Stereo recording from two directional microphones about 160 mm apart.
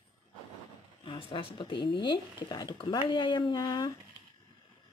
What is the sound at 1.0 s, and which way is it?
Speech, 35° left (ahead or behind).